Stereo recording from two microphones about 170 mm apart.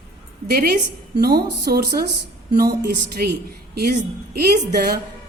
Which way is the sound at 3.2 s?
75° right (ahead or behind).